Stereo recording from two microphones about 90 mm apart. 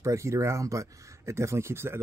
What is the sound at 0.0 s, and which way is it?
Speech, 35° right (ahead or behind).